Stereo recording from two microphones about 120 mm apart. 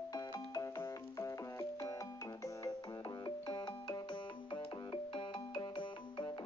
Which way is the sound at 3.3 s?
40° left (ahead or behind).